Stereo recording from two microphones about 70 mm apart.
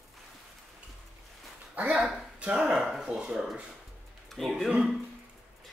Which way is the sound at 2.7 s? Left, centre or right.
Centre.